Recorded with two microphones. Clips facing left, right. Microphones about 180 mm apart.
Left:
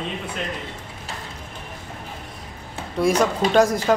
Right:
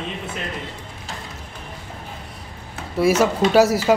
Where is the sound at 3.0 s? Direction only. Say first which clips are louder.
Right 2 dB; 5° right (ahead or behind).